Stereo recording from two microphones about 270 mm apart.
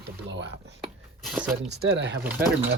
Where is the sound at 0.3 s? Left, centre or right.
Right.